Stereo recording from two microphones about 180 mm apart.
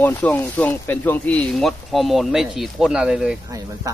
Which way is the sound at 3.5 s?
20° right (ahead or behind).